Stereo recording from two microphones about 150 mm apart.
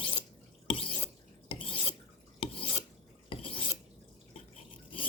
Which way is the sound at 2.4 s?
35° left (ahead or behind).